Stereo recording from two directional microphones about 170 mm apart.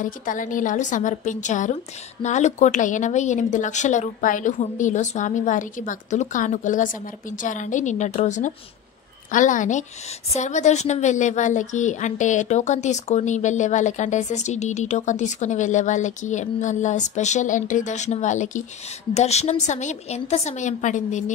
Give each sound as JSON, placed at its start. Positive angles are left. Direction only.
{"t": 0.0, "sound": "a woman's voice", "side_deg": 50}